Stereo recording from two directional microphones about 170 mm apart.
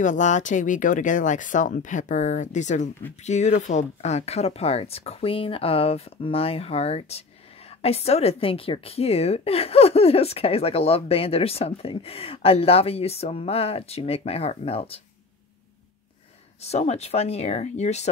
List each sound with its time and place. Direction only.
0.0 s a woman's voice: 45° left (ahead or behind)
16.6 s a woman's voice: 40° left (ahead or behind)